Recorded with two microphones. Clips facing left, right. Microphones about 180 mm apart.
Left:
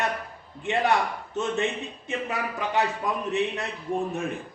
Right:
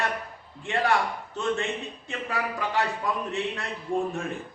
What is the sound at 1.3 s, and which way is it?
A man's voice, 20° left (ahead or behind).